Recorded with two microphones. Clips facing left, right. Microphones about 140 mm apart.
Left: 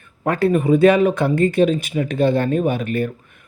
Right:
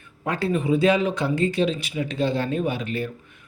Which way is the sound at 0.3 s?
55° left (ahead or behind).